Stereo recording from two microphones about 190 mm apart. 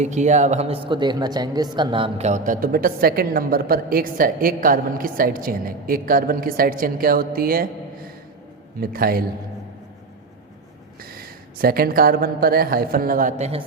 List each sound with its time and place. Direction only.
0.0 s speech: 40° right (ahead or behind)
8.8 s speech: 50° right (ahead or behind)
11.0 s speech: 50° right (ahead or behind); by 13.7 s 35° right (ahead or behind)